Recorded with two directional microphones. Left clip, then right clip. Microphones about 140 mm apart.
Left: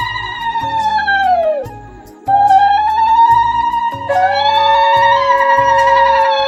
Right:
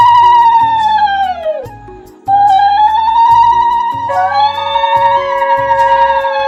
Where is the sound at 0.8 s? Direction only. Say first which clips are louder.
Right 3 dB; centre (ahead or behind).